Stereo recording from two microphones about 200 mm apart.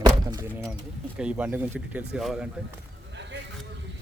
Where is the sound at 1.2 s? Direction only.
5° right (ahead or behind).